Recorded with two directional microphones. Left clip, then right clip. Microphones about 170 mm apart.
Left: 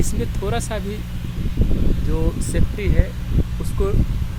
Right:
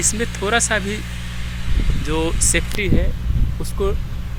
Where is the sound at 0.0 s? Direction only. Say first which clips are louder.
Right 5 dB; 5° left (ahead or behind).